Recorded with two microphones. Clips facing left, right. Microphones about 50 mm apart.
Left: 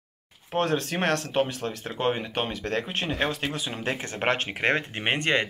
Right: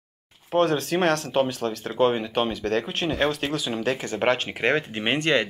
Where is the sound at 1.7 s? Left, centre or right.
Left.